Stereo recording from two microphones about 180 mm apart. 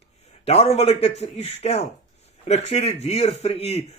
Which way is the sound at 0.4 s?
35° left (ahead or behind).